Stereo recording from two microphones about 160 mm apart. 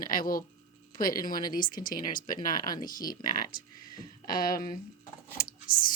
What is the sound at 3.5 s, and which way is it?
A woman's voice, 65° left (ahead or behind).